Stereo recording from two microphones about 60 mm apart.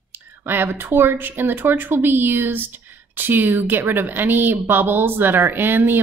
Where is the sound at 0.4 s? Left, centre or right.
Right.